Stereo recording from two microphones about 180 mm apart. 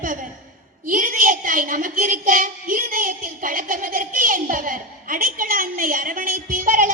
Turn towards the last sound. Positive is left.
turn(degrees=-50)  # may be behind; listen again after turning